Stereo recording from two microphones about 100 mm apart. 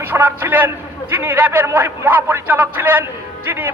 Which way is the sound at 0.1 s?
20° right (ahead or behind).